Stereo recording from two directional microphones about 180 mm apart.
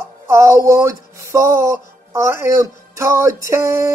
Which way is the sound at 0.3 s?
15° right (ahead or behind).